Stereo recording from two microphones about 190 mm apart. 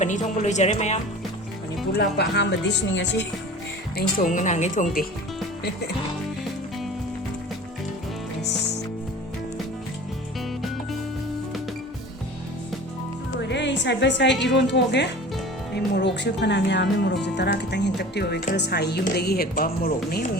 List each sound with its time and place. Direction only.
0.0 s speech: 40° left (ahead or behind)
2.0 s speech: 60° left (ahead or behind)
3.9 s speech: 45° left (ahead or behind)
13.5 s a woman's voice: 65° left (ahead or behind); by 20.3 s 50° left (ahead or behind)